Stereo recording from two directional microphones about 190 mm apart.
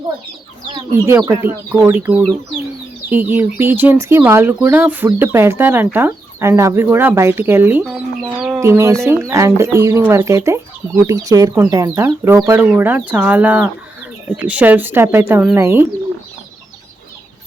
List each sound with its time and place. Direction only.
1.0 s speech: 15° right (ahead or behind)
3.1 s speech: 10° right (ahead or behind)
8.6 s speech: 15° right (ahead or behind)